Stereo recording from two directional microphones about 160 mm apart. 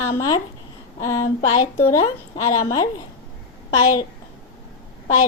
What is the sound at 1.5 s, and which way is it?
Speech, 45° left (ahead or behind).